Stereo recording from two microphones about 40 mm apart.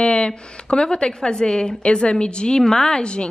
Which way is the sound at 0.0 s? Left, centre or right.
Left.